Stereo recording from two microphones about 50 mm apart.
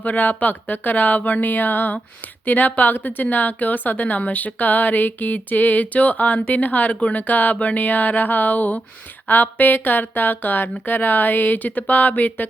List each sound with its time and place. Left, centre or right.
0.0 s a woman's voice: left
6.9 s speech: left
7.2 s a woman's voice: left